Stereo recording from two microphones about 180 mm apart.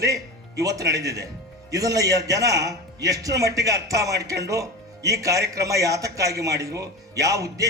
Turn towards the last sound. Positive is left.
turn(degrees=-20)  # may be behind; listen again after turning